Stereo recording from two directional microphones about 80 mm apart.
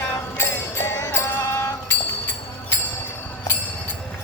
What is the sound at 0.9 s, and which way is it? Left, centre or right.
Music, left.